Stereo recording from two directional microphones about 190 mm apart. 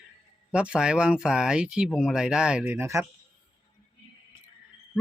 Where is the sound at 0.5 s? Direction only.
5° right (ahead or behind).